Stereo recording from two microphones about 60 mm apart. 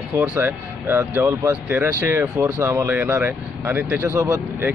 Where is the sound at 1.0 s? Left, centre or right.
Right.